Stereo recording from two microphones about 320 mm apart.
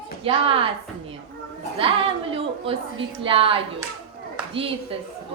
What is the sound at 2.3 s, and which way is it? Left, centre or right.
A woman's voice, centre.